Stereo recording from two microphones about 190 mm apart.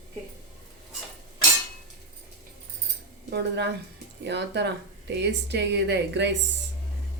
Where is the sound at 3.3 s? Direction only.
65° right (ahead or behind).